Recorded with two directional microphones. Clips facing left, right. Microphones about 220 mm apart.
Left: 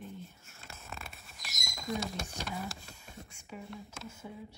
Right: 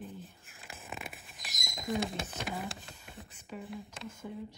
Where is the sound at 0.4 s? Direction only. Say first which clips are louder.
Right 2 dB; 15° right (ahead or behind).